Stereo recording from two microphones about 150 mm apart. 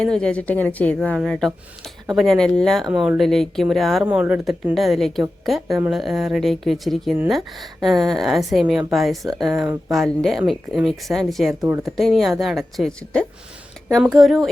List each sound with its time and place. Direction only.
0.0 s a woman's voice: 5° left (ahead or behind)
2.9 s speech: 10° right (ahead or behind)
3.2 s a woman's voice: centre (ahead or behind)
4.0 s a woman's voice: 10° right (ahead or behind)
11.6 s speech: 20° right (ahead or behind)
11.9 s a woman's voice: centre (ahead or behind)